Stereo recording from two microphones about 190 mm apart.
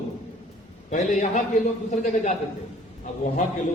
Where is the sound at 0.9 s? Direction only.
40° left (ahead or behind).